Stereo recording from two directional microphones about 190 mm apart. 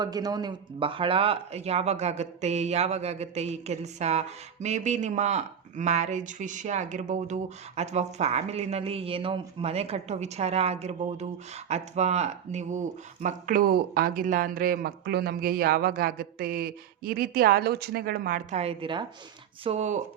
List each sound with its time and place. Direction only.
0.0 s speech: 20° right (ahead or behind); by 18.6 s 45° right (ahead or behind)
18.6 s a woman's voice: 30° right (ahead or behind)